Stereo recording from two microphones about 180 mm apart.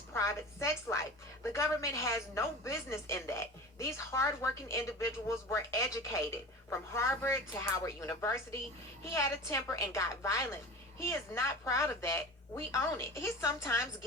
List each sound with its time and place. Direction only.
0.1 s a woman's voice: 15° left (ahead or behind)